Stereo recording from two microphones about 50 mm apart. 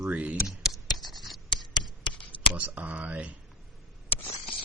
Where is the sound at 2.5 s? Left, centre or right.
Right.